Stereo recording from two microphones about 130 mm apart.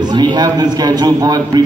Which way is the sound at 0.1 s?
35° right (ahead or behind).